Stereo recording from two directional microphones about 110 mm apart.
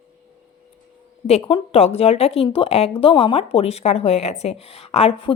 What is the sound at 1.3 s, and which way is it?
Speech, 75° left (ahead or behind).